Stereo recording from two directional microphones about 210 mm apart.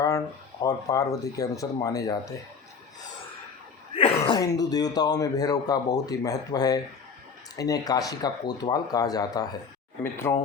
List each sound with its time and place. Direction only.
0.6 s speech: 15° left (ahead or behind)
3.9 s speech: 25° left (ahead or behind)